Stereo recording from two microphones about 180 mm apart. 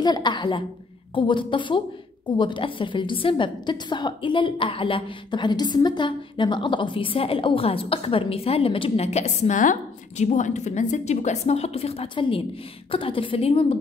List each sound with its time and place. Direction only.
0.0 s a woman's voice: 25° left (ahead or behind)